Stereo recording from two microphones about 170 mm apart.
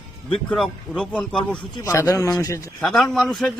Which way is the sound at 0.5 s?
Centre (ahead or behind).